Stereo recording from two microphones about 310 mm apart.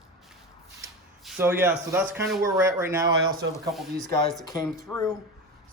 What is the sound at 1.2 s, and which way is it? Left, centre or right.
Speech, centre.